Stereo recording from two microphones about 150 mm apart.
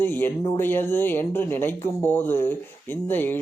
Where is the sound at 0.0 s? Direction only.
15° left (ahead or behind).